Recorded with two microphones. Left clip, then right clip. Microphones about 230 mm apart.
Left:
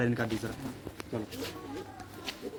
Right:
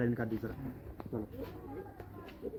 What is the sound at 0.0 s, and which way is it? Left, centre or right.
Speech, left.